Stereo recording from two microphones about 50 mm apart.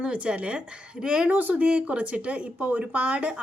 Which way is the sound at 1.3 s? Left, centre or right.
Right.